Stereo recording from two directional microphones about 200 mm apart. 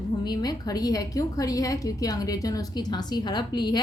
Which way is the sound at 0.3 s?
20° left (ahead or behind).